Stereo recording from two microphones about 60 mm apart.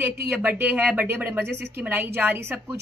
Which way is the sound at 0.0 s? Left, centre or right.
Right.